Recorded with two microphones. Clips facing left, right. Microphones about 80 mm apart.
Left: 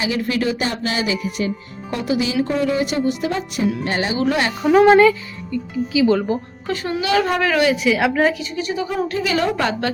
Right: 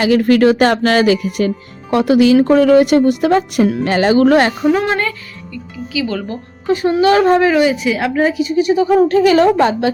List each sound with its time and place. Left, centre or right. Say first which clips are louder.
0.0 s speech: right 10 dB; right
3.8 s speech: right 8 dB; right
4.1 s speech: right 11 dB; right
4.6 s speech: left 4 dB; centre
5.5 s speech: left 5 dB; left
7.0 s a woman's voice: right 8 dB; right
7.5 s a woman's voice: right 3 dB; centre
8.5 s a woman's voice: right 10 dB; right
8.9 s a woman's voice: right 12 dB; right
9.6 s a woman's voice: right 7 dB; right